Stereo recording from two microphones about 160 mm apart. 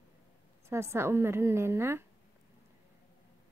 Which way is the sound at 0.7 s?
15° right (ahead or behind).